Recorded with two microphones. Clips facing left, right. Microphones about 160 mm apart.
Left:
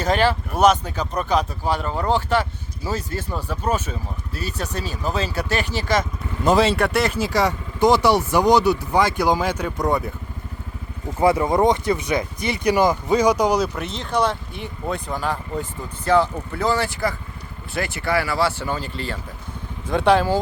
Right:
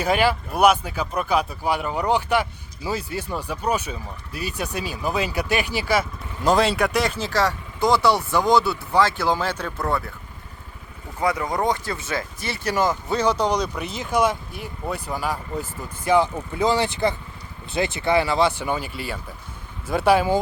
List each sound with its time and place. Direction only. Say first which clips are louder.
0.0 s speech: left 1 dB; 10° right (ahead or behind)
6.4 s speech: left 2 dB; centre (ahead or behind)
7.2 s speech: left 2 dB; 15° left (ahead or behind)
11.2 s speech: left 6 dB; 30° left (ahead or behind); by 20.2 s 5° right (ahead or behind)